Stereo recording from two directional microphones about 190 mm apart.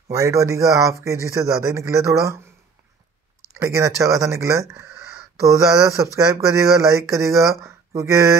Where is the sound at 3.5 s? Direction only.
15° right (ahead or behind).